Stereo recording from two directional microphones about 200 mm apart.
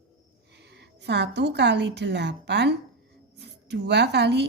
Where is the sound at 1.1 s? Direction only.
60° right (ahead or behind).